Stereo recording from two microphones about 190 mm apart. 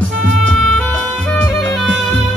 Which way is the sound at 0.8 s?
5° left (ahead or behind).